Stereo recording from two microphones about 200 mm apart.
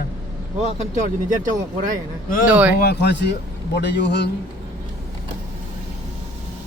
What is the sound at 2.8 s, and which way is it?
Speech, 60° left (ahead or behind).